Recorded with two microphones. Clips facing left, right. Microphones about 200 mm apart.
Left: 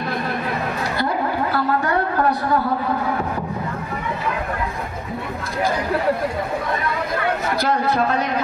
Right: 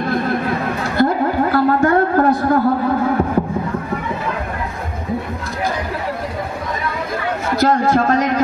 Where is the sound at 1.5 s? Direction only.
50° right (ahead or behind).